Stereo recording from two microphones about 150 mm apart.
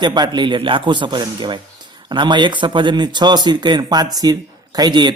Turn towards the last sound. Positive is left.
turn(degrees=-30)  # may be behind; listen again after turning